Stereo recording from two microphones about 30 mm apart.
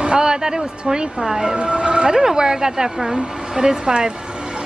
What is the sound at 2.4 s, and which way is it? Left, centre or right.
A woman's voice, right.